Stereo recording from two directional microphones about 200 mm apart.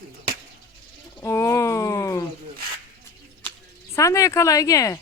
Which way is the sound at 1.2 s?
15° left (ahead or behind).